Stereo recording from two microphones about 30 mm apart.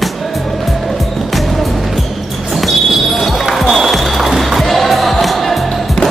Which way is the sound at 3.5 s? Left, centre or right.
Centre.